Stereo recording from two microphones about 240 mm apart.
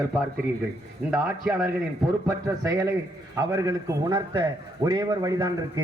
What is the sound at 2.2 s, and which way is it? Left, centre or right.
A man's voice, centre.